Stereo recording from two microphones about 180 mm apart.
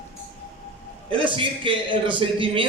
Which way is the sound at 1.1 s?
30° right (ahead or behind).